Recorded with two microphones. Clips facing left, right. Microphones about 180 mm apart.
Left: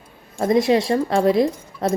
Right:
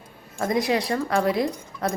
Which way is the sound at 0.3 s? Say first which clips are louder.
Left 6 dB; 25° left (ahead or behind).